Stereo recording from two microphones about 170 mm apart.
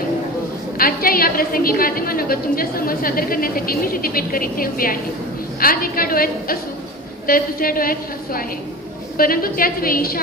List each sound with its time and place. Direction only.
0.7 s a woman's voice: 60° left (ahead or behind)